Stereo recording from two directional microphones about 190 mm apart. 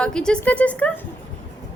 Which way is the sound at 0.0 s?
5° left (ahead or behind).